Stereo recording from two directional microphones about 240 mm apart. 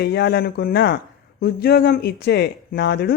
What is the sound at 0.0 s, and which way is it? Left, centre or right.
Speech, left.